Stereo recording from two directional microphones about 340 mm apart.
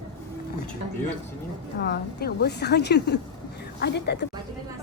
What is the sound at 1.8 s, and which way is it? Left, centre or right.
A woman's voice, left.